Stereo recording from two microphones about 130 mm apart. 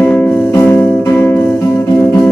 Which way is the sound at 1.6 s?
20° left (ahead or behind).